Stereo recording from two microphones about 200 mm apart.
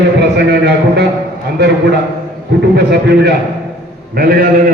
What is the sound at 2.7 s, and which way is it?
A man's voice, 55° right (ahead or behind).